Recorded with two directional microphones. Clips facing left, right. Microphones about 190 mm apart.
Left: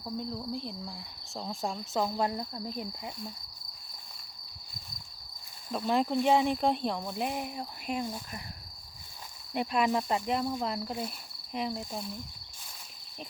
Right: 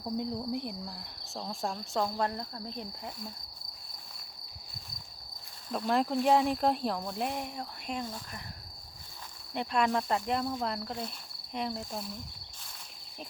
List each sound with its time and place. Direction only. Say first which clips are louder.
0.0 s cricket: right 2 dB; 15° right (ahead or behind)
0.9 s speech: left 1 dB; centre (ahead or behind)
5.7 s speech: left 1 dB; centre (ahead or behind)
9.6 s speech: left 1 dB; 5° left (ahead or behind)